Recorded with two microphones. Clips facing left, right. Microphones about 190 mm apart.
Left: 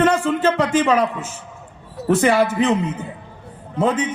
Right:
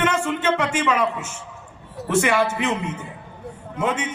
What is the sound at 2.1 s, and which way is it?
Speech, 35° left (ahead or behind).